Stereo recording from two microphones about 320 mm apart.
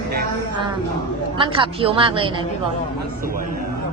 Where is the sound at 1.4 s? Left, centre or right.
Centre.